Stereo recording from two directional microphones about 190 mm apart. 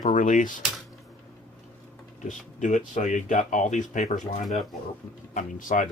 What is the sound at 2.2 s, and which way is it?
Speech, 40° left (ahead or behind).